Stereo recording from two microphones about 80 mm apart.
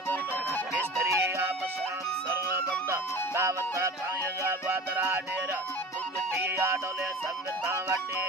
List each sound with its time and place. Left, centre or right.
0.8 s music: right
6.3 s music: right